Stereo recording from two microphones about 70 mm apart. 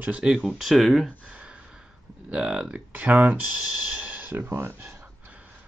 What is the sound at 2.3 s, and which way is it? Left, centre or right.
Speech, centre.